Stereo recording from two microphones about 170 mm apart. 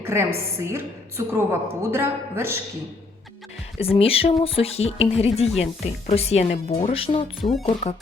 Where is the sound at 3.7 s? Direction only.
35° left (ahead or behind).